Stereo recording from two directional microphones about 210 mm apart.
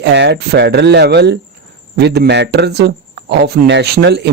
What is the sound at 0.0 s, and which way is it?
Speech, 55° right (ahead or behind).